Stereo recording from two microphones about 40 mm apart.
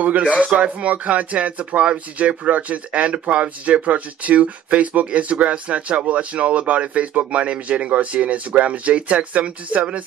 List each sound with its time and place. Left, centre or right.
0.0 s speech: right